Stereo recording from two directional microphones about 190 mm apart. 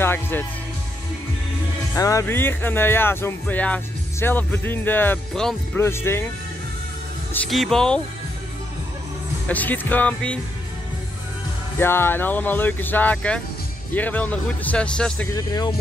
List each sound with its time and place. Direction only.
0.0 s speech: 10° left (ahead or behind)
2.0 s speech: 15° left (ahead or behind)
5.8 s speech: 15° left (ahead or behind)
7.3 s speech: centre (ahead or behind)
9.5 s speech: 10° left (ahead or behind)
11.8 s speech: 10° left (ahead or behind)
15.3 s speech: 20° left (ahead or behind)